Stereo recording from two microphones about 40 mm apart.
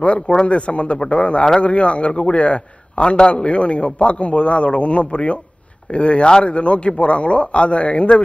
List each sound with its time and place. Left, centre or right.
0.5 s a man's voice: left